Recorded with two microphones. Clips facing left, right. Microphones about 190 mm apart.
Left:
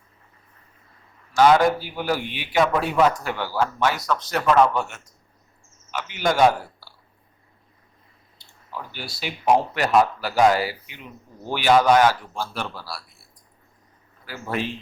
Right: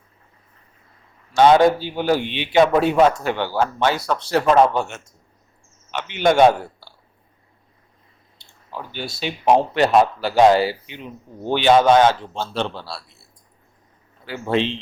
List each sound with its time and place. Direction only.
1.4 s speech: 25° right (ahead or behind)
8.4 s speech: 25° right (ahead or behind)
14.3 s speech: 25° right (ahead or behind)